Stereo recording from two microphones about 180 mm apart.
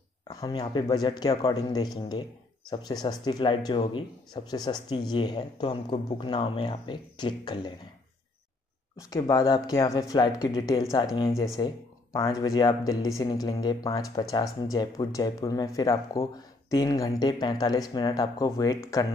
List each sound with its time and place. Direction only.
0.3 s speech: 25° left (ahead or behind)
9.1 s speech: 20° left (ahead or behind)